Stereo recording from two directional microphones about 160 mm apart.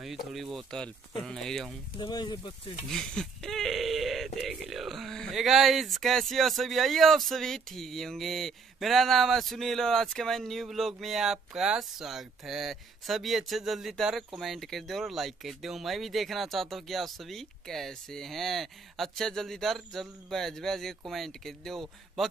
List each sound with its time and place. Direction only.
0.0 s speech: centre (ahead or behind)
2.0 s speech: 25° left (ahead or behind)
2.9 s speech: 5° left (ahead or behind)